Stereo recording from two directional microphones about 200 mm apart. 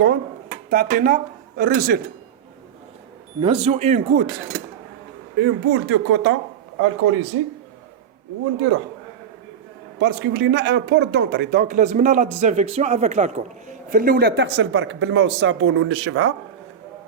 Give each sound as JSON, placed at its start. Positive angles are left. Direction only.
{"t": 0.7, "sound": "speech", "side_deg": -45}
{"t": 3.4, "sound": "speech", "side_deg": -30}
{"t": 5.4, "sound": "speech", "side_deg": -75}
{"t": 10.0, "sound": "speech", "side_deg": -55}